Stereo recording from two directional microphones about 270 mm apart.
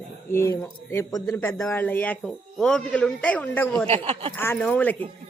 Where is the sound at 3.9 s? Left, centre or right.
Right.